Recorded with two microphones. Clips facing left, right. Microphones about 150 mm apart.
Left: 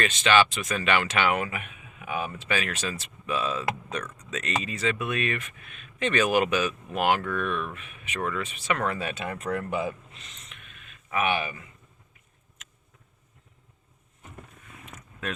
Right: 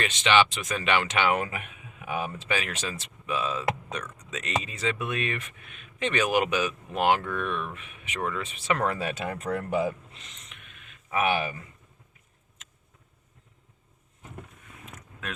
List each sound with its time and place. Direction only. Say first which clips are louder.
0.0 s speech: left 1 dB; 20° right (ahead or behind)
1.4 s speech: even; 30° right (ahead or behind)
2.5 s speech: left 3 dB; 20° right (ahead or behind); by 9.9 s 35° right (ahead or behind)
10.5 s a sound: left 1 dB; 15° right (ahead or behind)
11.1 s speech: right 1 dB; 30° right (ahead or behind)